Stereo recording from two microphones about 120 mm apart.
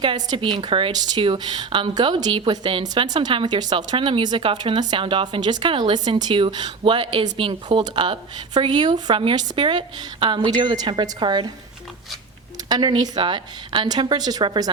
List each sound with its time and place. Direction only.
0.0 s a woman's voice: 40° right (ahead or behind)
12.6 s a woman's voice: 35° right (ahead or behind)